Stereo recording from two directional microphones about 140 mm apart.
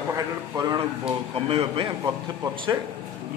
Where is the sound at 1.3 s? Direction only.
40° right (ahead or behind).